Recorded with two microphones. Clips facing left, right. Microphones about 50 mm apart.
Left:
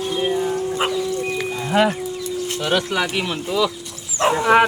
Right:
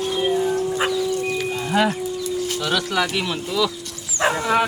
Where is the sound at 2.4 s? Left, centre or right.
Left.